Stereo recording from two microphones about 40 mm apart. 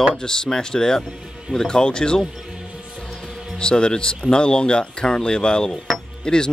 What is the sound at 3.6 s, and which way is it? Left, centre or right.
Speech, left.